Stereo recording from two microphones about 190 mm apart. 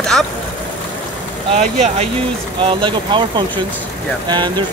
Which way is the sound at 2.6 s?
25° right (ahead or behind).